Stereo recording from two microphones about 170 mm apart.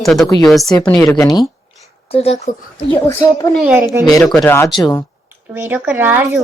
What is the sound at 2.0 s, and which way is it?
Speech, 35° left (ahead or behind).